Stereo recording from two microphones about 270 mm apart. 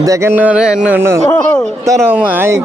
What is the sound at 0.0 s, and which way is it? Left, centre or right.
Music, centre.